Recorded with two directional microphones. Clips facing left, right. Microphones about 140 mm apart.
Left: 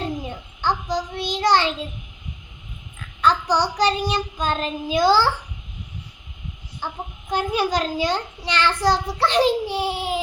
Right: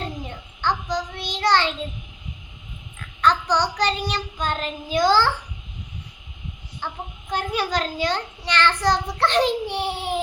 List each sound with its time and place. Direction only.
0.3 s child singing: 10° left (ahead or behind)
3.2 s a child's voice: 5° left (ahead or behind)
6.8 s a child's voice: 5° left (ahead or behind)